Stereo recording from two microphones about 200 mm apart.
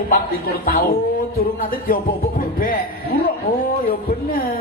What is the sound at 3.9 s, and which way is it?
Speech, 45° left (ahead or behind).